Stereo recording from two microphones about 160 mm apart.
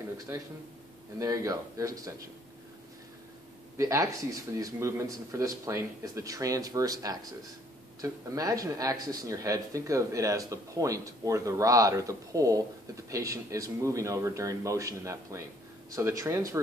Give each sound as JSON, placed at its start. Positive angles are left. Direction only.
{"t": 0.3, "sound": "a man's voice", "side_deg": -15}
{"t": 3.7, "sound": "speech", "side_deg": -20}